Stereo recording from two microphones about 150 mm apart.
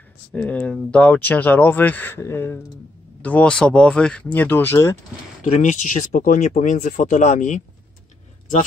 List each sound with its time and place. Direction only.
0.3 s speech: 10° left (ahead or behind)
5.4 s speech: 55° left (ahead or behind)